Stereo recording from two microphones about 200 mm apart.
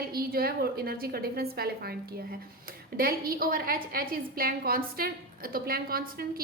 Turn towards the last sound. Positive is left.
turn(degrees=-45)  # may be behind; listen again after turning